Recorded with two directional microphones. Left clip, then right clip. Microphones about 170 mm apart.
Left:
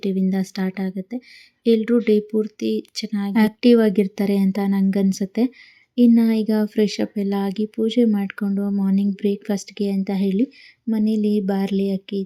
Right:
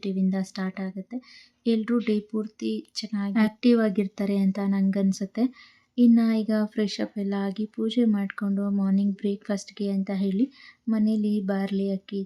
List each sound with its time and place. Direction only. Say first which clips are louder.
0.0 s speech: left 6 dB; 20° left (ahead or behind)